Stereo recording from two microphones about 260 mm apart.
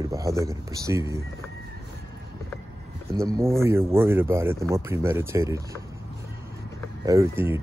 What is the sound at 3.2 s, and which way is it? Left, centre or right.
Speech, centre.